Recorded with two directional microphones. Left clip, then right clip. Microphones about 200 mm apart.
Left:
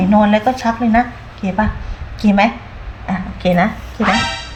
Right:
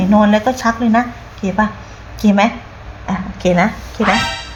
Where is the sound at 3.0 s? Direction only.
35° right (ahead or behind).